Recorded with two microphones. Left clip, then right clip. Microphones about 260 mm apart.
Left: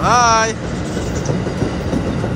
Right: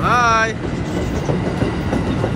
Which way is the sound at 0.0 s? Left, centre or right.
Centre.